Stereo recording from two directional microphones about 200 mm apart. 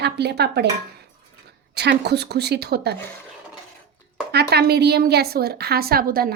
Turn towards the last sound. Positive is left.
turn(degrees=-45)  # may be behind; listen again after turning